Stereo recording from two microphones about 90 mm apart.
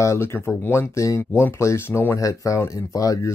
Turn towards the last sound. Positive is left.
turn(degrees=35)  # may be behind; listen again after turning